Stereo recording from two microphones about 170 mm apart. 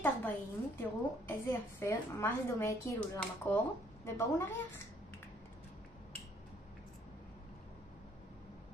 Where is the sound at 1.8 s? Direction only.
15° left (ahead or behind).